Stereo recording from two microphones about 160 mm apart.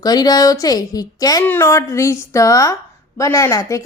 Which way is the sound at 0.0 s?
25° left (ahead or behind).